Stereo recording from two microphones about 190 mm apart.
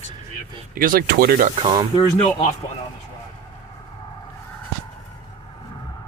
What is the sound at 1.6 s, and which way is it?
Speech, 25° right (ahead or behind).